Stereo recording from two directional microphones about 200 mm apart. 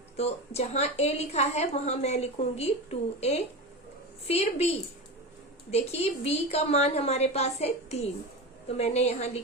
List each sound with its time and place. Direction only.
0.2 s a woman's voice: 35° left (ahead or behind)
5.7 s a woman's voice: 30° left (ahead or behind)